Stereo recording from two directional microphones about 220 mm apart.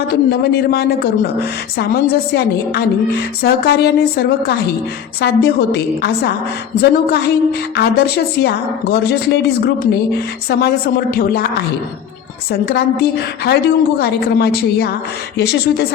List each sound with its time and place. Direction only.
0.1 s a woman's voice: 45° left (ahead or behind)
2.3 s a woman's voice: 50° left (ahead or behind)
12.5 s a woman's voice: 45° left (ahead or behind)